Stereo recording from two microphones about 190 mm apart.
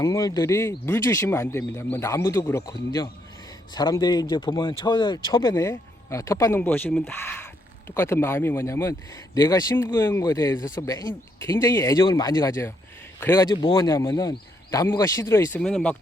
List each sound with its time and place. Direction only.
0.0 s a man's voice: 15° left (ahead or behind)